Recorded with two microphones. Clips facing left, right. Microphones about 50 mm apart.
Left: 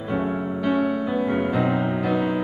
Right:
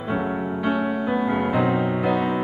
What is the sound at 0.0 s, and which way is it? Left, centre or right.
Music, centre.